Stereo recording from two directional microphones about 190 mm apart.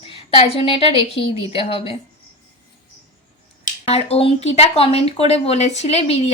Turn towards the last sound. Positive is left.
turn(degrees=35)  # may be behind; listen again after turning